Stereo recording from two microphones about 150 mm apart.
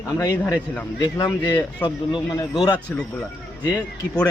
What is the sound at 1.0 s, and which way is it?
Speech, 25° left (ahead or behind).